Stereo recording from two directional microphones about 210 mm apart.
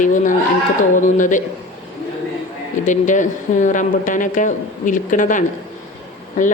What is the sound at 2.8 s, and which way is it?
A woman's voice, 35° left (ahead or behind).